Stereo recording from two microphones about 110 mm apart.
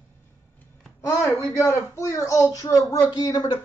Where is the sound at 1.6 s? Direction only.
30° left (ahead or behind).